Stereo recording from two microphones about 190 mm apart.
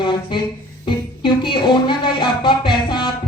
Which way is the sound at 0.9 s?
25° left (ahead or behind).